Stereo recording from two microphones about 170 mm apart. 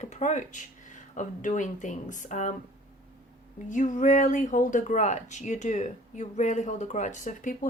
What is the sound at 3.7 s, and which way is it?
Speech, 50° left (ahead or behind).